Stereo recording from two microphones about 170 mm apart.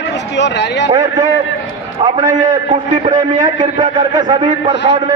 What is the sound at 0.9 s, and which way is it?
A man's voice, 20° right (ahead or behind).